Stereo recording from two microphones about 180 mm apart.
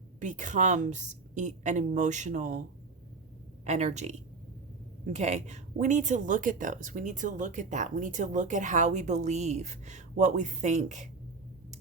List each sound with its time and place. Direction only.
0.2 s speech: 45° right (ahead or behind)
3.6 s speech: 40° right (ahead or behind)
5.1 s speech: 40° right (ahead or behind)